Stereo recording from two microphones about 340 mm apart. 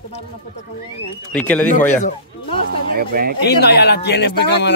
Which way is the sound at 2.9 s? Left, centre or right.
Right.